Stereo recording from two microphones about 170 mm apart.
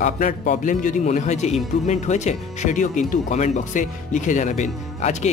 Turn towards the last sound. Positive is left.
turn(degrees=45)  # may be behind; listen again after turning